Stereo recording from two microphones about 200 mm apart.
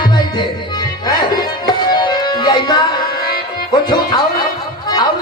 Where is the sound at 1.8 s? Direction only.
20° left (ahead or behind).